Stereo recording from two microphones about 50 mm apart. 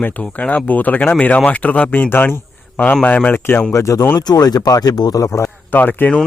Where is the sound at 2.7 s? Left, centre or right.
Left.